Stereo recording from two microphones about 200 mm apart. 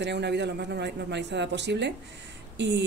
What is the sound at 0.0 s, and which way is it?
Speech, 60° right (ahead or behind).